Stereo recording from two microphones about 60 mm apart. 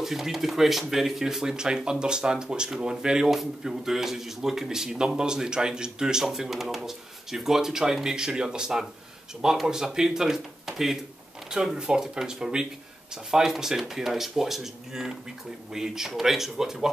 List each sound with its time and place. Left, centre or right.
0.0 s speech: centre